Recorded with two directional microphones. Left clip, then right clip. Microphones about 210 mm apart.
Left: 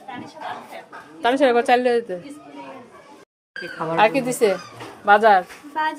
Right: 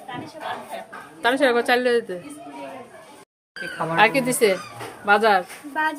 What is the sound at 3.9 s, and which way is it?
A woman's voice, centre (ahead or behind).